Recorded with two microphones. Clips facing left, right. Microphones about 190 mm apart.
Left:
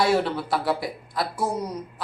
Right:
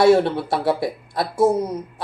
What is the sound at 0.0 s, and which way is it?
Speech, 25° right (ahead or behind).